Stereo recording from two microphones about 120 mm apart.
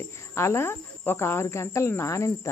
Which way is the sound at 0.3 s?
20° left (ahead or behind).